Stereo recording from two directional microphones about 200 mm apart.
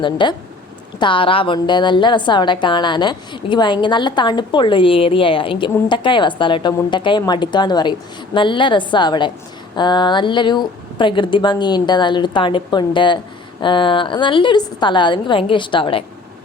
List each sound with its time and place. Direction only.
0.0 s a woman's voice: 25° left (ahead or behind)